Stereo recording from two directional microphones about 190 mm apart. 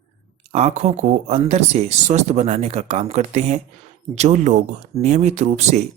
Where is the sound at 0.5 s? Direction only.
35° right (ahead or behind).